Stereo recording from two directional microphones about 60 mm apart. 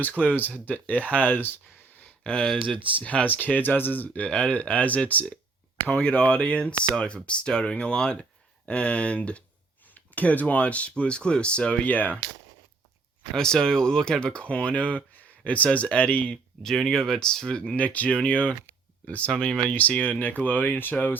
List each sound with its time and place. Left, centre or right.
0.2 s speech: left
2.2 s speech: centre
3.2 s speech: left
4.3 s speech: centre
13.3 s speech: centre
16.6 s speech: centre
17.7 s speech: left
20.4 s speech: left